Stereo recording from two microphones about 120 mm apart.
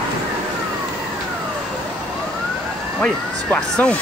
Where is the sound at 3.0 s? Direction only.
10° left (ahead or behind).